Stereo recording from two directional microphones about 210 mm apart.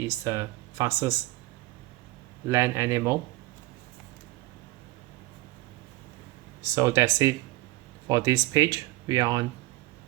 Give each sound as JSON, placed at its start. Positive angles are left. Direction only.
{"t": 0.0, "sound": "speech", "side_deg": -15}
{"t": 2.5, "sound": "speech", "side_deg": -15}
{"t": 6.6, "sound": "speech", "side_deg": -15}